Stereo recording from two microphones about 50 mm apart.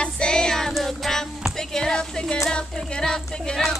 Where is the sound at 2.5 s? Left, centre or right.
Centre.